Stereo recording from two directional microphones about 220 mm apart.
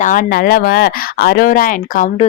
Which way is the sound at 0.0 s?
40° left (ahead or behind).